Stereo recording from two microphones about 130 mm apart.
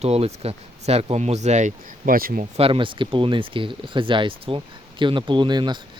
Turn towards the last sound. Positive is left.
turn(degrees=-35)  # may be behind; listen again after turning